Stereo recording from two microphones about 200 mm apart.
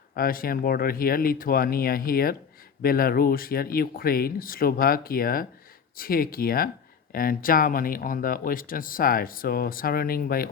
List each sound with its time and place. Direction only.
0.1 s speech: 45° left (ahead or behind)